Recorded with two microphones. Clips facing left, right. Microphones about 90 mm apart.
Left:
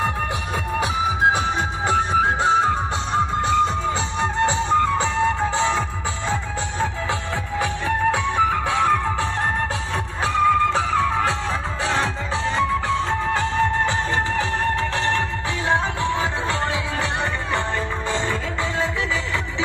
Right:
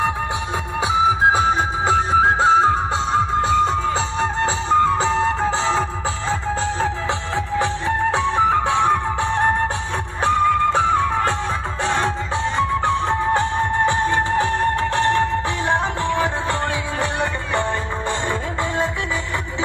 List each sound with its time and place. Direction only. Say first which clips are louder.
1.9 s music: right 3 dB; 25° right (ahead or behind)
7.5 s music: right 2 dB; 25° right (ahead or behind)
10.2 s music: right 1 dB; 35° right (ahead or behind)
12.8 s music: right 3 dB; 25° right (ahead or behind)